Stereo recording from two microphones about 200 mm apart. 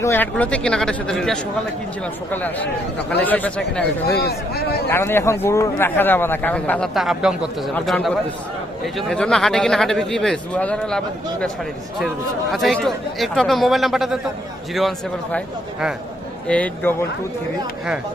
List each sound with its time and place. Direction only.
0.0 s a man's voice: 10° left (ahead or behind)
4.1 s speech: 55° left (ahead or behind)
4.9 s a man's voice: 10° left (ahead or behind)